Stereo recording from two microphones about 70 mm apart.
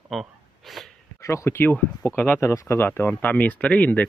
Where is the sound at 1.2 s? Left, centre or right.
Left.